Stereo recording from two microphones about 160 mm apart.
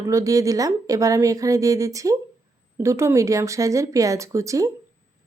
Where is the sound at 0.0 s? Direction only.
20° right (ahead or behind).